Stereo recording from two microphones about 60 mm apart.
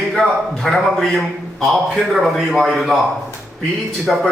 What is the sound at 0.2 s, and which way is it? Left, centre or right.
Speech, centre.